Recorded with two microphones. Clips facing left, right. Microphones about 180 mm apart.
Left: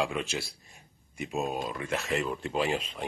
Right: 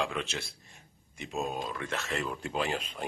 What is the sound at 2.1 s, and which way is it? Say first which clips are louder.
Speech: left 4 dB; centre (ahead or behind).